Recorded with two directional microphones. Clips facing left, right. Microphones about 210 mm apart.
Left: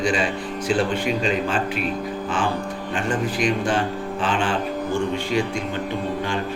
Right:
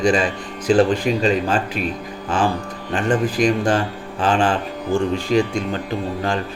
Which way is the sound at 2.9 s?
40° right (ahead or behind).